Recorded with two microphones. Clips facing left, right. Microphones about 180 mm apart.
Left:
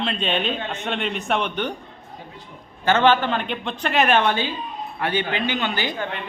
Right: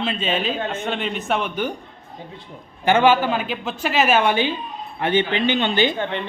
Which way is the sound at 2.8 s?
10° right (ahead or behind).